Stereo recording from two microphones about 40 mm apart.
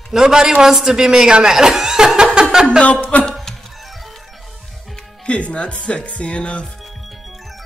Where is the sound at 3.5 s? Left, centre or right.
Centre.